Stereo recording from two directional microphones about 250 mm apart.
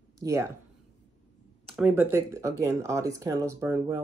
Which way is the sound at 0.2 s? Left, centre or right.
Centre.